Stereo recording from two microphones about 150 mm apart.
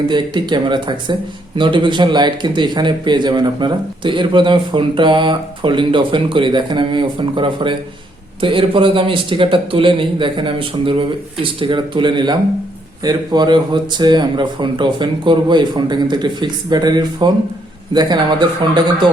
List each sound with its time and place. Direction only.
0.1 s a man's voice: 30° right (ahead or behind)